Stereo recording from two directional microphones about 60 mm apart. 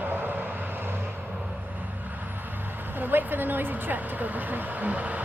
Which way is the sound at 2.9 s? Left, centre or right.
Right.